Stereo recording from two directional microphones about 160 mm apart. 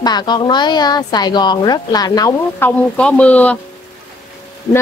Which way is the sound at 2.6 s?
10° left (ahead or behind).